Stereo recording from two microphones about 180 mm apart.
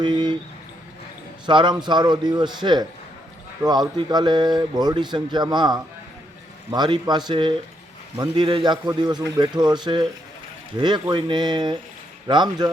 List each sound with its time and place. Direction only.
0.0 s speech: 25° right (ahead or behind)
1.5 s speech: 25° right (ahead or behind)